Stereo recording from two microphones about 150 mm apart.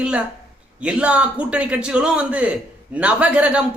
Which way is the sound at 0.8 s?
10° right (ahead or behind).